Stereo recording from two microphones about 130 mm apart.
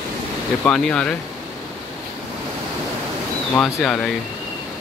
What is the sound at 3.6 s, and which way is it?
Speech, centre (ahead or behind).